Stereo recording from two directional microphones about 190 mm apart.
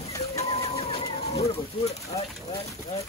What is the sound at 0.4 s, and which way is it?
Bird, 35° left (ahead or behind).